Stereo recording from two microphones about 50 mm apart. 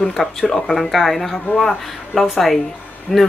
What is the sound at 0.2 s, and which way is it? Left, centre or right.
Speech, centre.